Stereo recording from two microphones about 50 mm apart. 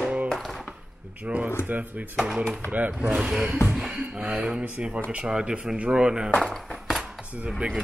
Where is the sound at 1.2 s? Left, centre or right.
Right; by 6.3 s centre.